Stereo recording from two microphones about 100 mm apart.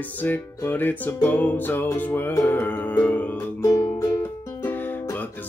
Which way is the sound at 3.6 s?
35° left (ahead or behind).